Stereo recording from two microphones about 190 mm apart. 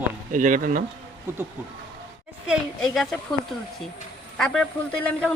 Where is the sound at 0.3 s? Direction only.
45° right (ahead or behind).